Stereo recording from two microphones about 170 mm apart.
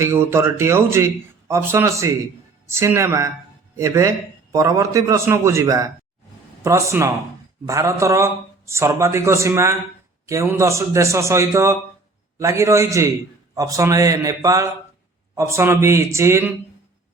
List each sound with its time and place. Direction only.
0.0 s a man's voice: 15° right (ahead or behind)